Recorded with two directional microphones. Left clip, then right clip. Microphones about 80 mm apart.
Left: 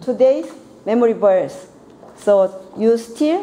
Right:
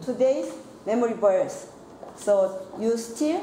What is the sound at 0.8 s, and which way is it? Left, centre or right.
A woman's voice, left.